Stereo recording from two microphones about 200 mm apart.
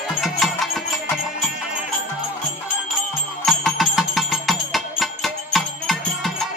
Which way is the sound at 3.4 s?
Centre (ahead or behind).